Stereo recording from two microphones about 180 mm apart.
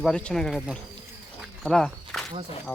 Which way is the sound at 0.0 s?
5° left (ahead or behind).